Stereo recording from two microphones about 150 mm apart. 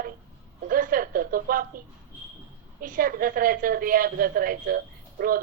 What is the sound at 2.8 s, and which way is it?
A woman's voice, 70° right (ahead or behind).